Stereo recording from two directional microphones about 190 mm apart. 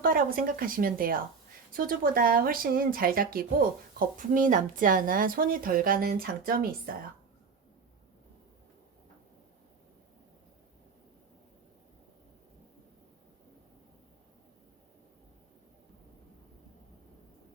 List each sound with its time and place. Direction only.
0.0 s speech: 50° right (ahead or behind)